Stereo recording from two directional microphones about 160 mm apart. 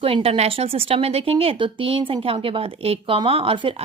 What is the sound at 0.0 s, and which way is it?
A woman's voice, 35° right (ahead or behind).